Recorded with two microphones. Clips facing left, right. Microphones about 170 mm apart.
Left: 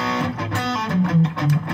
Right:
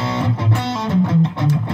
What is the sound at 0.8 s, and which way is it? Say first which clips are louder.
Music: right 3 dB; 25° right (ahead or behind).